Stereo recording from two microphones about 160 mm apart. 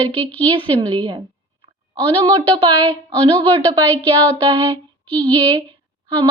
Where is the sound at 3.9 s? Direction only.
10° left (ahead or behind).